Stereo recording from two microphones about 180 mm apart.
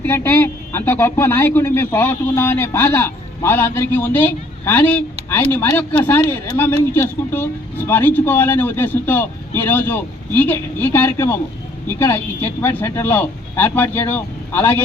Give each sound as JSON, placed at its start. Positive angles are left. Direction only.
{"t": 0.0, "sound": "a man's voice", "side_deg": 10}